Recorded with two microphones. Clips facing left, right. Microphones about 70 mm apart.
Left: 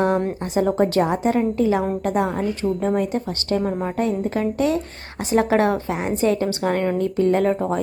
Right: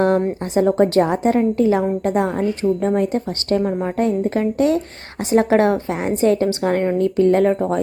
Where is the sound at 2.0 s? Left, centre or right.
Right.